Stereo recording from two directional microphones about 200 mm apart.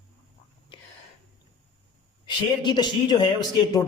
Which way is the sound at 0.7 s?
25° left (ahead or behind).